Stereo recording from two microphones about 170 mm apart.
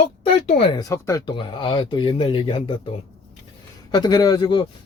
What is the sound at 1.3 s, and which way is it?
Speech, 30° left (ahead or behind).